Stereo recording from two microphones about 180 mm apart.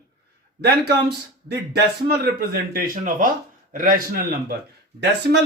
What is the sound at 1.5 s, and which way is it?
Speech, 65° right (ahead or behind).